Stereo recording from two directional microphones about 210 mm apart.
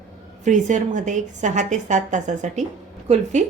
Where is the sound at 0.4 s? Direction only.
35° right (ahead or behind).